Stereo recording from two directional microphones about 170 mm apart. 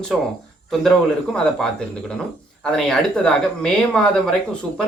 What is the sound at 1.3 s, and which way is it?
Speech, 5° left (ahead or behind).